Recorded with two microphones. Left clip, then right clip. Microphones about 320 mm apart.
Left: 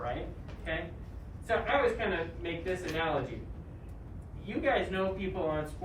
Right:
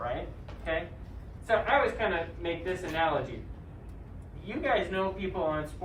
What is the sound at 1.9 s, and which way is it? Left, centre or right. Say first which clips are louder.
A man's voice: right 3 dB; centre.